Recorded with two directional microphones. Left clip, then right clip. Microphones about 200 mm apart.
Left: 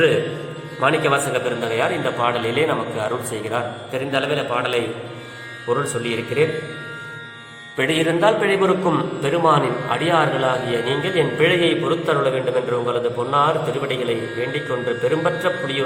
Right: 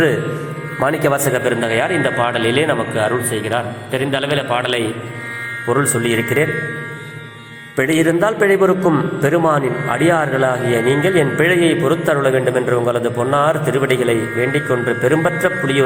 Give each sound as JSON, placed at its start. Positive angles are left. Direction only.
{"t": 0.8, "sound": "speech", "side_deg": -25}
{"t": 1.5, "sound": "a man's voice", "side_deg": -10}
{"t": 7.8, "sound": "a man's voice", "side_deg": -20}